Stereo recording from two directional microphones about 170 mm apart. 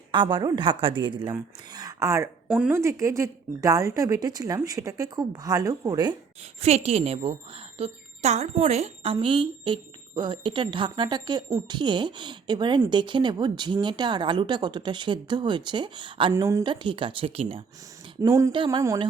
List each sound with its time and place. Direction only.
0.1 s a woman's voice: 25° right (ahead or behind)
2.5 s a woman's voice: 5° right (ahead or behind); by 6.1 s 25° right (ahead or behind)
6.6 s a woman's voice: 40° right (ahead or behind)
16.3 s a woman's voice: 15° right (ahead or behind)
16.6 s a woman's voice: 30° right (ahead or behind)
18.2 s a woman's voice: 15° right (ahead or behind)
18.5 s a woman's voice: 30° right (ahead or behind)
18.8 s a woman's voice: 20° right (ahead or behind)